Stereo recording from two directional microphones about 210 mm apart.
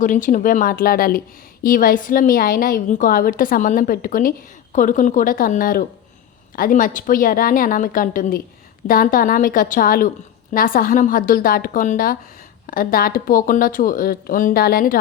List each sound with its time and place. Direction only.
0.0 s a woman's voice: 40° left (ahead or behind)